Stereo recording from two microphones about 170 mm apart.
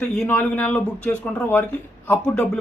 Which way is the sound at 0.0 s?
10° left (ahead or behind).